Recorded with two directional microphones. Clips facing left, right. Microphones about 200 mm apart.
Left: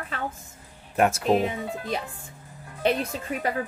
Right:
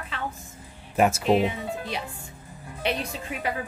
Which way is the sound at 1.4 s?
45° left (ahead or behind).